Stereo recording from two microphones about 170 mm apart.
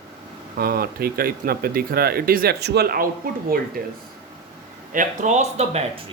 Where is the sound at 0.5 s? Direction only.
65° right (ahead or behind).